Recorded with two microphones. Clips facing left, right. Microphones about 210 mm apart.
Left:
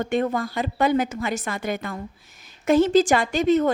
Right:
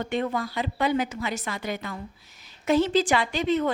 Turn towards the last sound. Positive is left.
turn(degrees=45)  # may be behind; listen again after turning